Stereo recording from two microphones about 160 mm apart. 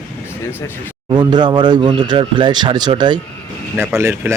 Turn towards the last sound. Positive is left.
turn(degrees=-15)  # may be behind; listen again after turning